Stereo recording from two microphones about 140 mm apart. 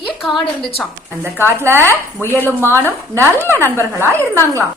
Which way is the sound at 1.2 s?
15° right (ahead or behind).